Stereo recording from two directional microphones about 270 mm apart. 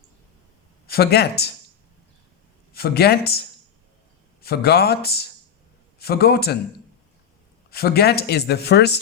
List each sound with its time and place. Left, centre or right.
0.9 s speech: left
2.7 s speech: left
4.4 s speech: left
7.7 s speech: left